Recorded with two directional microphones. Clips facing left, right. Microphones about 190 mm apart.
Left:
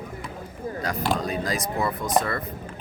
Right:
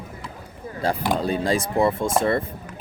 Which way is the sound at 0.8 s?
30° right (ahead or behind).